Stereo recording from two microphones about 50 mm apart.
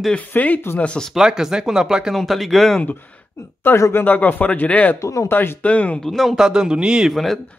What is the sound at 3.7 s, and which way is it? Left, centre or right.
Speech, left.